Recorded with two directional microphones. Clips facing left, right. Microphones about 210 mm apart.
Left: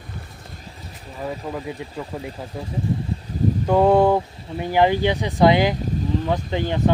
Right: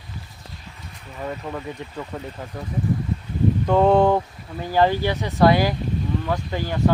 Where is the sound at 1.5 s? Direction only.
5° left (ahead or behind).